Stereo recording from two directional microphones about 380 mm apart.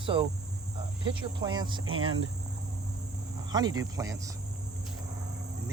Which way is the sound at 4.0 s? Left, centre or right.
Centre.